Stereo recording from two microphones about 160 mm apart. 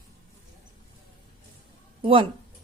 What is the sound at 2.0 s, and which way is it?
Speech, 35° right (ahead or behind).